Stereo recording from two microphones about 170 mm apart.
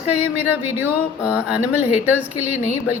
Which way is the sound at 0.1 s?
10° right (ahead or behind).